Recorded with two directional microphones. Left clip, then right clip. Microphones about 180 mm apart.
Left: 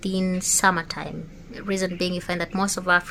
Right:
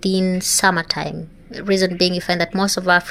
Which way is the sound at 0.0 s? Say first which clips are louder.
Right 7 dB; 25° right (ahead or behind).